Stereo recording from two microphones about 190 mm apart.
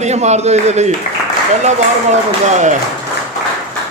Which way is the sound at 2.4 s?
40° right (ahead or behind).